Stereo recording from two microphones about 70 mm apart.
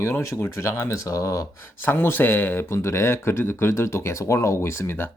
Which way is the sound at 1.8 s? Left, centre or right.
Left.